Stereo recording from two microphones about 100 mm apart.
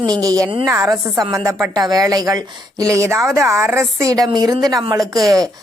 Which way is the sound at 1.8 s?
40° right (ahead or behind).